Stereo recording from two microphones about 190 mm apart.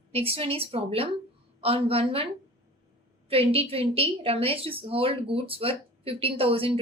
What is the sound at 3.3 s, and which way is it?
A woman's voice, 30° right (ahead or behind).